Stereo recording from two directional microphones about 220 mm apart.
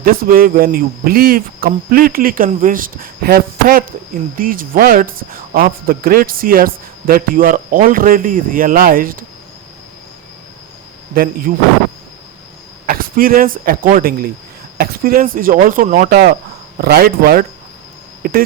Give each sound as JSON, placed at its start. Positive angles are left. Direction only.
{"t": 0.0, "sound": "speech", "side_deg": -40}
{"t": 11.1, "sound": "speech", "side_deg": -40}
{"t": 12.8, "sound": "speech", "side_deg": -40}